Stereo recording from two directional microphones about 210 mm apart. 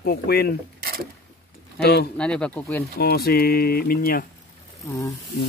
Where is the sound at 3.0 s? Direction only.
45° left (ahead or behind).